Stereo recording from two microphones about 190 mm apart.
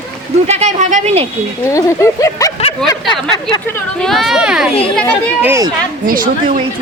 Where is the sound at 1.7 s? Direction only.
15° left (ahead or behind).